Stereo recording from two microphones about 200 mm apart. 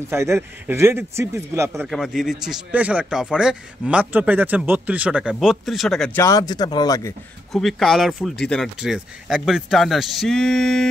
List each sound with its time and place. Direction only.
0.1 s speech: 10° right (ahead or behind)
1.9 s a man's voice: centre (ahead or behind)
6.2 s speech: 20° left (ahead or behind)
7.5 s a man's voice: centre (ahead or behind)